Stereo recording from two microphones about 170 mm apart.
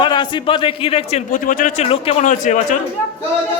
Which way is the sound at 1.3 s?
50° left (ahead or behind).